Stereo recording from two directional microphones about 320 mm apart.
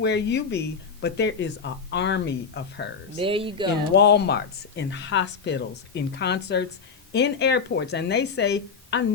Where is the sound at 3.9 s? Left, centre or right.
Left.